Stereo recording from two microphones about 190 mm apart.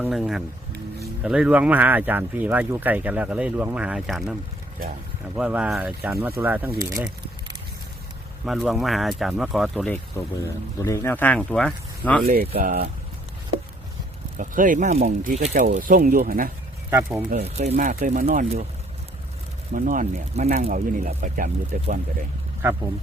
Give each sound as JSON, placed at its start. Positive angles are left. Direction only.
{"t": 0.0, "sound": "speech", "side_deg": 0}
{"t": 5.4, "sound": "speech", "side_deg": -5}
{"t": 8.4, "sound": "speech", "side_deg": 0}
{"t": 10.8, "sound": "speech", "side_deg": 15}
{"t": 12.3, "sound": "speech", "side_deg": -50}
{"t": 14.3, "sound": "speech", "side_deg": -45}
{"t": 16.9, "sound": "speech", "side_deg": -10}
{"t": 17.4, "sound": "speech", "side_deg": -35}
{"t": 19.7, "sound": "speech", "side_deg": -45}